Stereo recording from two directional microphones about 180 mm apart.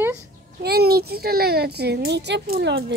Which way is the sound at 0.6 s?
60° right (ahead or behind).